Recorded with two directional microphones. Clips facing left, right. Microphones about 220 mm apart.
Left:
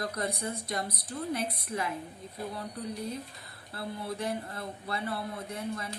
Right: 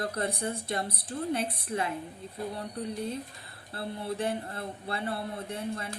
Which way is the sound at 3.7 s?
30° right (ahead or behind).